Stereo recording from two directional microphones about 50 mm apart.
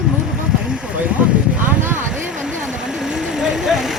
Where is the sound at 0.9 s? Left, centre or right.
Right.